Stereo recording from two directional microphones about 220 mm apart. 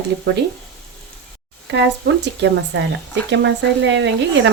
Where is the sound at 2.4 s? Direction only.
55° right (ahead or behind).